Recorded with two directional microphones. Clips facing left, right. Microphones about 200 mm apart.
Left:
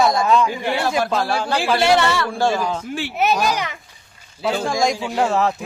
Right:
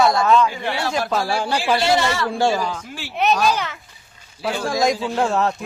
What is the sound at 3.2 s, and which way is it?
Speech, 10° left (ahead or behind).